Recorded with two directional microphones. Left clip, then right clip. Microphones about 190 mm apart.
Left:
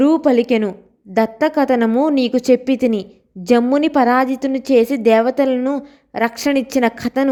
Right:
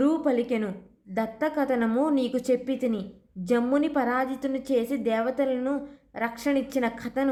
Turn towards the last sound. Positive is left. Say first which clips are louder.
# left 11 dB
turn(degrees=45)  # may be behind; listen again after turning